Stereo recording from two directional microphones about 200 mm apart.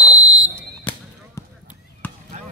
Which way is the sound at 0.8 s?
10° left (ahead or behind).